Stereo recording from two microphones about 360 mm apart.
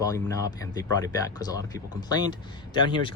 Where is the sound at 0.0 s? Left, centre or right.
Centre.